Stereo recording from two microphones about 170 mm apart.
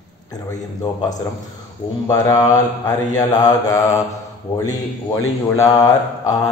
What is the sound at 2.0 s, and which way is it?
Speech, 20° left (ahead or behind).